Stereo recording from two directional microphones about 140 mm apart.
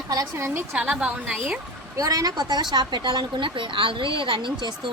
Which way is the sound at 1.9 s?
25° right (ahead or behind).